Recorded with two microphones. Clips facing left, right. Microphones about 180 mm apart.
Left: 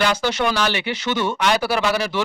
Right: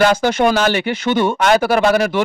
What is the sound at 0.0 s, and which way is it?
Speech, 50° right (ahead or behind).